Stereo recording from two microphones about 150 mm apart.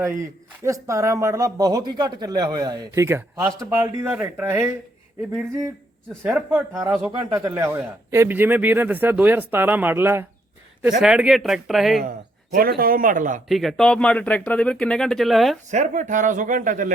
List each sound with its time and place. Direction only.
0.0 s a man's voice: 20° right (ahead or behind)
6.2 s a man's voice: 10° right (ahead or behind)
11.0 s speech: 5° right (ahead or behind)
12.5 s speech: 75° right (ahead or behind)
13.5 s speech: centre (ahead or behind)
15.7 s speech: 55° right (ahead or behind)